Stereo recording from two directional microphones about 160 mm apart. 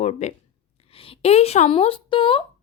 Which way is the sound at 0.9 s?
35° left (ahead or behind).